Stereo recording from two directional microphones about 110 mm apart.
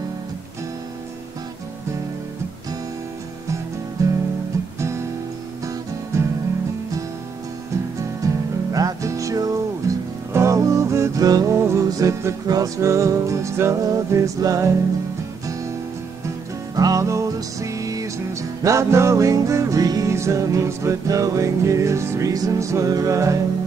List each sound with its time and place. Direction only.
4.0 s music: 30° right (ahead or behind)
6.1 s music: 25° right (ahead or behind)
8.2 s music: 30° right (ahead or behind)
16.7 s music: 35° right (ahead or behind)